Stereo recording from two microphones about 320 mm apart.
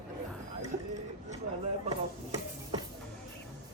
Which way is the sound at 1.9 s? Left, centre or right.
Centre.